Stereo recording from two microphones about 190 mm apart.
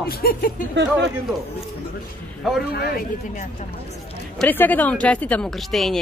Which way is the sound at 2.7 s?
55° left (ahead or behind).